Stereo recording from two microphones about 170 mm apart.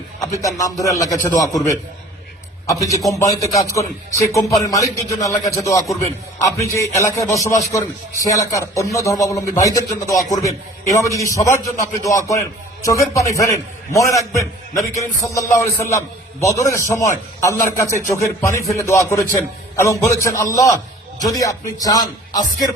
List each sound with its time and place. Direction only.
0.4 s a man's voice: 20° left (ahead or behind)